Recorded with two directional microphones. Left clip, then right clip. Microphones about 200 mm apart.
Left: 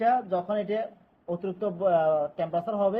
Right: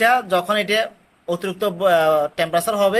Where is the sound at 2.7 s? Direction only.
35° right (ahead or behind).